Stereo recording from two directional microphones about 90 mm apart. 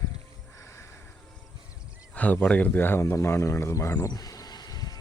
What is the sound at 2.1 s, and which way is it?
Speech, 15° left (ahead or behind).